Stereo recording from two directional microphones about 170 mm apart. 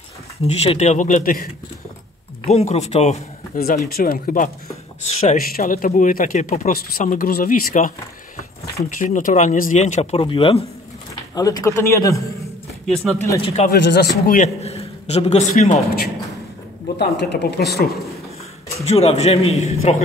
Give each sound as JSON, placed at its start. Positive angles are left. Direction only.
{"t": 0.4, "sound": "speech", "side_deg": 40}
{"t": 2.4, "sound": "a man's voice", "side_deg": 40}
{"t": 3.8, "sound": "speech", "side_deg": 60}
{"t": 5.2, "sound": "speech", "side_deg": 45}
{"t": 10.2, "sound": "a man's voice", "side_deg": 30}
{"t": 11.3, "sound": "a man's voice", "side_deg": 20}
{"t": 12.8, "sound": "speech", "side_deg": 5}
{"t": 13.4, "sound": "a man's voice", "side_deg": 35}
{"t": 13.7, "sound": "speech", "side_deg": 75}
{"t": 14.2, "sound": "speech", "side_deg": 55}
{"t": 14.6, "sound": "a man's voice", "side_deg": 40}
{"t": 17.0, "sound": "speech", "side_deg": 75}
{"t": 18.9, "sound": "a man's voice", "side_deg": 40}